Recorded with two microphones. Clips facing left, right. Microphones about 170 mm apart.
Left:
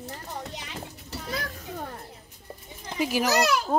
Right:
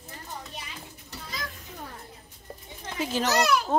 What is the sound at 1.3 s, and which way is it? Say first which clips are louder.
Children playing: left 6 dB; 50° left (ahead or behind).